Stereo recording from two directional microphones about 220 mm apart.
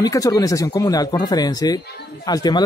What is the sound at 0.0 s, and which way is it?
Speech, 15° left (ahead or behind).